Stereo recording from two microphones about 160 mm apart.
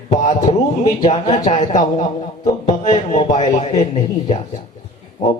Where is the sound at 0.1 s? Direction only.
50° left (ahead or behind).